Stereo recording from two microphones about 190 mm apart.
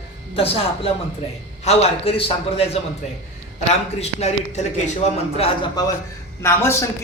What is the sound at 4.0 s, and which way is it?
A man's voice, 35° left (ahead or behind).